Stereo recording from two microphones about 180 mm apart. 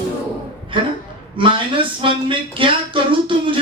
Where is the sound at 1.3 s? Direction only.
30° right (ahead or behind).